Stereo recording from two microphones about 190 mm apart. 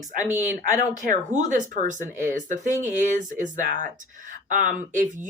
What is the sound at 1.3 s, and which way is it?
Speech, 40° right (ahead or behind).